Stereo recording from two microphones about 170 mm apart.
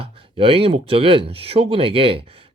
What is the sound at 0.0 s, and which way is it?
Speech, 35° right (ahead or behind).